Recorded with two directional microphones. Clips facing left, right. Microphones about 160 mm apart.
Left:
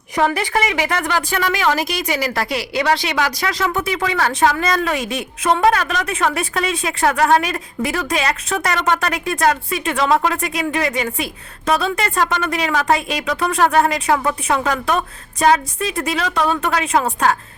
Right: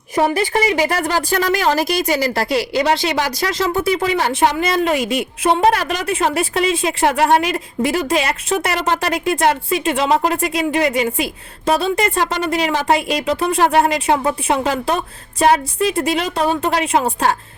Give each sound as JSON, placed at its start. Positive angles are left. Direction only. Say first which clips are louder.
{"t": 0.2, "sound": "a woman's voice", "louder": "right 2 dB", "side_deg": -25}